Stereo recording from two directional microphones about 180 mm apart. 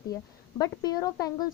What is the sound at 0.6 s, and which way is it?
Speech, 20° left (ahead or behind).